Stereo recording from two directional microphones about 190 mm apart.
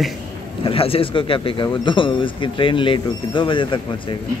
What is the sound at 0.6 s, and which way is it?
Speech, 30° left (ahead or behind).